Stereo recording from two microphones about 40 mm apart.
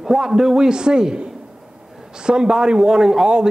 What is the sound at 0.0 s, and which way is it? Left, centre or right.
A man's voice, centre.